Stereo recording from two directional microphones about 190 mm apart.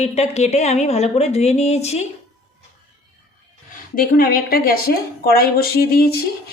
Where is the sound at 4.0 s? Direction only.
50° left (ahead or behind).